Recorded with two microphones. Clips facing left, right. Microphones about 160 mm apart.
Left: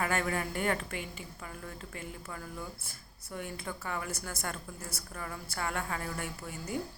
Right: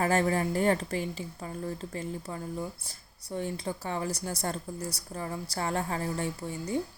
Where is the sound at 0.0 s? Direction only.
35° right (ahead or behind).